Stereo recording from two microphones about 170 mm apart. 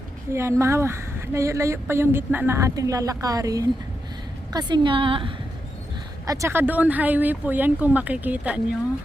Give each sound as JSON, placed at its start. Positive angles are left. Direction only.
{"t": 0.3, "sound": "a woman's voice", "side_deg": -15}
{"t": 6.2, "sound": "speech", "side_deg": -20}